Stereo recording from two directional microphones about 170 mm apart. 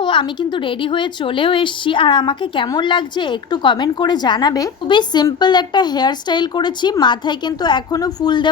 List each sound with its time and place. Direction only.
0.0 s a woman's voice: 30° left (ahead or behind)